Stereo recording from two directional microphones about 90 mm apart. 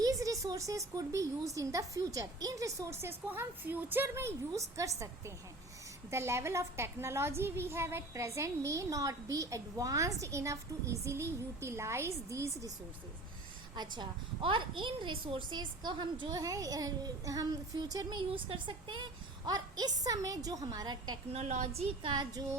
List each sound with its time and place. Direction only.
0.0 s a woman's voice: 40° right (ahead or behind)
13.7 s a woman's voice: 60° right (ahead or behind)
18.2 s speech: 80° right; by 19.0 s 65° right (ahead or behind)
19.5 s a woman's voice: 50° right (ahead or behind)